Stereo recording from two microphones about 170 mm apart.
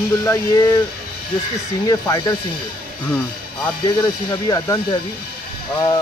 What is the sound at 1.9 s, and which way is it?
Speech, 20° left (ahead or behind).